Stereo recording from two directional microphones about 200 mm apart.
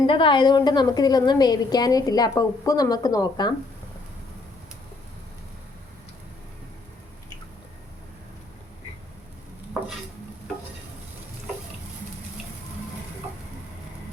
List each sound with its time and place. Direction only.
0.1 s a woman's voice: 25° left (ahead or behind)